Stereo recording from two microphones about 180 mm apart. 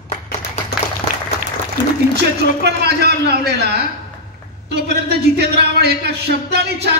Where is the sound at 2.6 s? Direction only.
65° right (ahead or behind).